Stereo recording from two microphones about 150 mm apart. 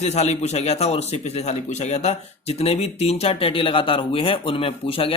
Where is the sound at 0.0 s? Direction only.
45° left (ahead or behind).